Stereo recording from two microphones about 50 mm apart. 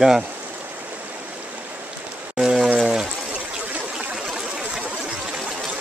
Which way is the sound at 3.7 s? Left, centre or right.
Right.